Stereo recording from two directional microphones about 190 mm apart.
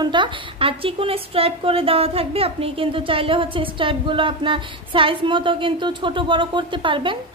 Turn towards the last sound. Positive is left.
turn(degrees=-25)  # may be behind; listen again after turning